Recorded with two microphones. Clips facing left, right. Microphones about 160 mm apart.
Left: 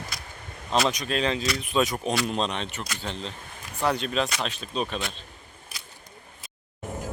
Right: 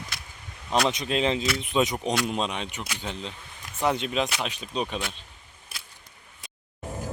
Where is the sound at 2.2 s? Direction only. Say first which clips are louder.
Left 1 dB; 10° right (ahead or behind).